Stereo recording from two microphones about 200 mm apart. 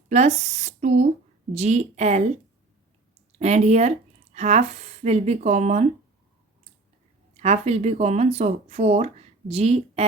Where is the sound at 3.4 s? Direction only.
35° right (ahead or behind).